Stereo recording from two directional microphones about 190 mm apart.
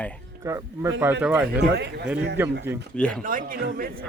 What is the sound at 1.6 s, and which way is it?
Speech, 60° right (ahead or behind).